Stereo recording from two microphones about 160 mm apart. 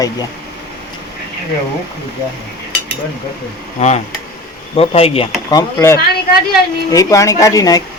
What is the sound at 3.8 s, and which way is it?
Speech, 45° left (ahead or behind).